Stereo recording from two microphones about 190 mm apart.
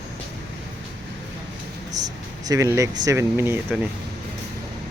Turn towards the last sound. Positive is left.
turn(degrees=-10)  # may be behind; listen again after turning